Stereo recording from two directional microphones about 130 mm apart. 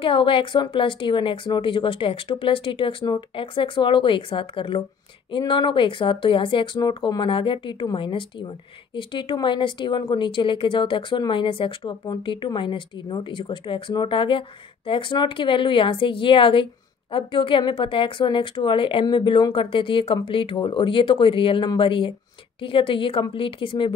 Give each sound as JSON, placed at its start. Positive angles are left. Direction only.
{"t": 0.0, "sound": "speech", "side_deg": 40}